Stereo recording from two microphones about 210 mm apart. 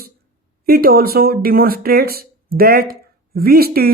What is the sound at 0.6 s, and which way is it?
Speech, 45° right (ahead or behind).